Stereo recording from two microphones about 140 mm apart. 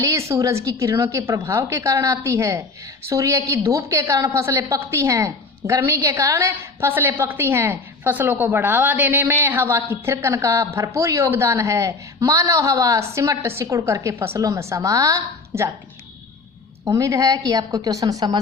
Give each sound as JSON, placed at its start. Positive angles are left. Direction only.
{"t": 0.0, "sound": "a woman's voice", "side_deg": -20}
{"t": 16.8, "sound": "a woman's voice", "side_deg": -20}